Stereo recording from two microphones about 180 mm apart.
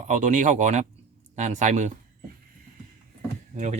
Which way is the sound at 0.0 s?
45° right (ahead or behind).